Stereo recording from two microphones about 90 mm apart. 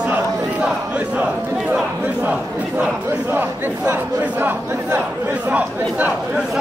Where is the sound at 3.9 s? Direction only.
20° right (ahead or behind).